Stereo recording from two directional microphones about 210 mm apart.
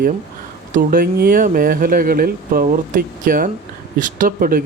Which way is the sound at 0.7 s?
40° right (ahead or behind).